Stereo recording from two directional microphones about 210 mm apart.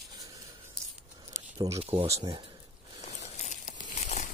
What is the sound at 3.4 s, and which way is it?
Crumpling, 35° left (ahead or behind).